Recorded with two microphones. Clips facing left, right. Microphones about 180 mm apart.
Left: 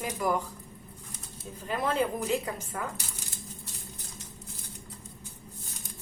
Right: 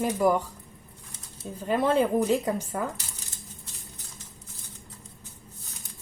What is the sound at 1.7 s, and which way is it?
A woman's voice, 35° right (ahead or behind).